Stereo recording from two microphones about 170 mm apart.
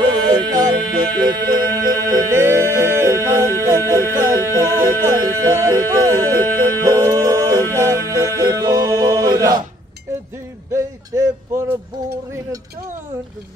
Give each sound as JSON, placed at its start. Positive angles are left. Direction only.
{"t": 0.0, "sound": "music", "side_deg": -25}
{"t": 6.6, "sound": "a capella", "side_deg": -20}
{"t": 8.4, "sound": "music", "side_deg": -20}
{"t": 10.7, "sound": "a sound", "side_deg": -15}